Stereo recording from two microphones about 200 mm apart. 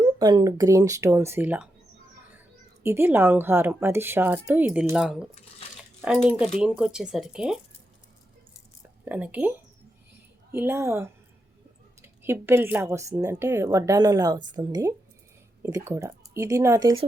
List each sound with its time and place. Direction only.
0.0 s a woman's voice: 20° right (ahead or behind)
2.8 s a woman's voice: 10° right (ahead or behind)
5.7 s crumpling: 5° right (ahead or behind)
6.2 s a woman's voice: 5° right (ahead or behind)
9.0 s a woman's voice: 5° right (ahead or behind)